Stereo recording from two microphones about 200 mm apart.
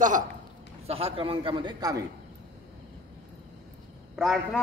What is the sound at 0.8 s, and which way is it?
A man's voice, 30° right (ahead or behind).